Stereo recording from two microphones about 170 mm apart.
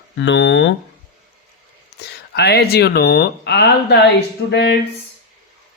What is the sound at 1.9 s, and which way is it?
Speech, 75° left (ahead or behind).